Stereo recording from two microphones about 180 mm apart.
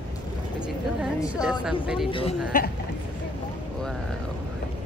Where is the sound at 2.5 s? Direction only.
50° left (ahead or behind).